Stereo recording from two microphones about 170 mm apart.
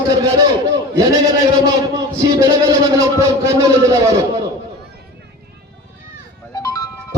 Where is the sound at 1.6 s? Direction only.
20° right (ahead or behind).